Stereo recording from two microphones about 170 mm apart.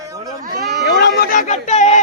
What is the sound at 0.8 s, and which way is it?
Speech, 90° left.